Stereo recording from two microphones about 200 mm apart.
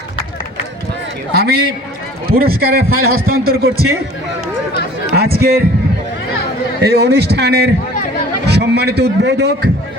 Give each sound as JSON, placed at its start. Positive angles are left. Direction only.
{"t": 1.3, "sound": "speech", "side_deg": -50}
{"t": 5.1, "sound": "speech", "side_deg": -50}
{"t": 6.8, "sound": "a man's voice", "side_deg": -55}